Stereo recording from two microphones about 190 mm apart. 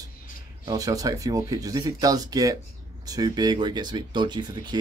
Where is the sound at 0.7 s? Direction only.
20° right (ahead or behind).